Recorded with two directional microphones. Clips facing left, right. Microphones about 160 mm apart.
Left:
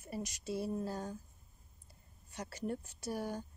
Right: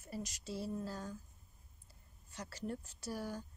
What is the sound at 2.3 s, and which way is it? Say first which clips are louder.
Speech: left 3 dB; 20° left (ahead or behind).